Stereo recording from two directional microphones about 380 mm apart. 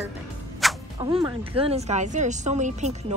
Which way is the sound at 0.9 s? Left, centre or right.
Centre.